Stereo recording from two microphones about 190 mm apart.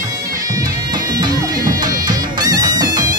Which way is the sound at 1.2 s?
20° right (ahead or behind).